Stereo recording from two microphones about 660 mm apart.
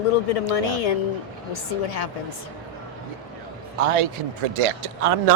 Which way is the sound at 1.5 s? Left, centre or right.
Left.